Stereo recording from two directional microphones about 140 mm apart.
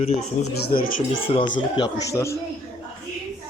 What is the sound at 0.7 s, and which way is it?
Speech, 90° left.